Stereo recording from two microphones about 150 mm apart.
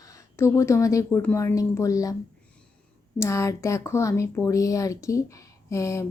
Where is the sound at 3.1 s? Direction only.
20° left (ahead or behind).